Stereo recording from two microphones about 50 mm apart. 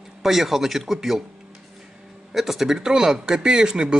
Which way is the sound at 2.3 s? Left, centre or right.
Centre.